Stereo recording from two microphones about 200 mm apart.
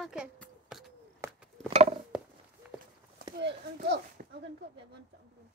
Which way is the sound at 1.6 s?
30° right (ahead or behind).